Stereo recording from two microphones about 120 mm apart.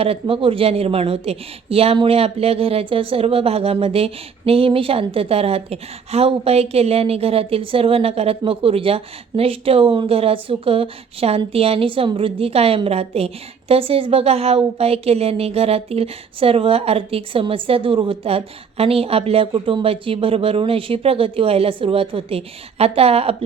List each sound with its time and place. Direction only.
0.0 s a woman's voice: 50° right (ahead or behind)